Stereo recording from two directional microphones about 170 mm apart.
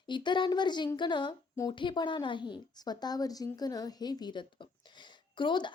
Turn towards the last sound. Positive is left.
turn(degrees=25)  # may be behind; listen again after turning